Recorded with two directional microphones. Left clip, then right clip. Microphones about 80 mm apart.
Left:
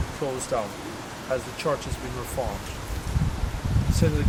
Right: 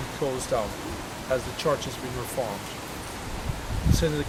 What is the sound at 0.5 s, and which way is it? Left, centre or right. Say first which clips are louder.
Speech: even; centre.